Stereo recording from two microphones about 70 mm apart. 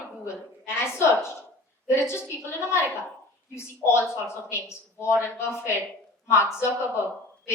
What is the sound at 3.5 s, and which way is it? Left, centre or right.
A woman's voice, left.